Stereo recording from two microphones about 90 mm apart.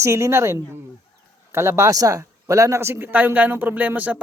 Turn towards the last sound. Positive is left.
turn(degrees=-15)  # may be behind; listen again after turning